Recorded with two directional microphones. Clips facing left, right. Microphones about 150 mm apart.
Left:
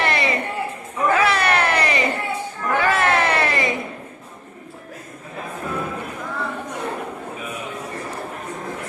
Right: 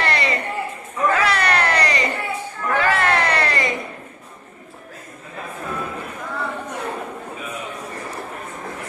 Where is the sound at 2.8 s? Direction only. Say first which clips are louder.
Left 1 dB; 20° left (ahead or behind).